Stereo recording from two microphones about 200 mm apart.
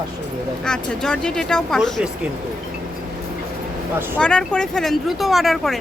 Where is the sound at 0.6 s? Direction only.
5° left (ahead or behind).